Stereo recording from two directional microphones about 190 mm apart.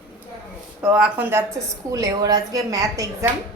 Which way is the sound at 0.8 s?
5° right (ahead or behind).